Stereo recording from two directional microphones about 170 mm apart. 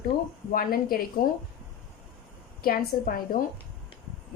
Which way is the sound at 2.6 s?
60° left (ahead or behind).